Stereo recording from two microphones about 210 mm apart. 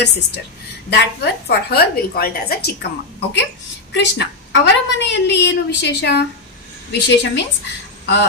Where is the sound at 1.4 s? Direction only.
50° left (ahead or behind).